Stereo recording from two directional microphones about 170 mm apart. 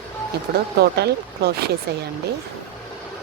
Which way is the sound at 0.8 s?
70° right (ahead or behind).